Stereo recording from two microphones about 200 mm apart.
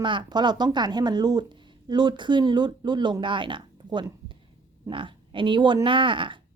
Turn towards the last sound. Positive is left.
turn(degrees=-25)  # may be behind; listen again after turning